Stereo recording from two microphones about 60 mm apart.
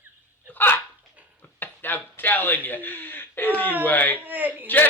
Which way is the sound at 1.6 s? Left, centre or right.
Left.